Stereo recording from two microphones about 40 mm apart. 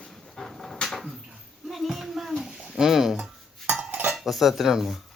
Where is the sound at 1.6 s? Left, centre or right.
Centre.